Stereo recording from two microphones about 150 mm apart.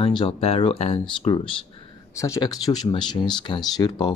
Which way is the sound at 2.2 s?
20° left (ahead or behind).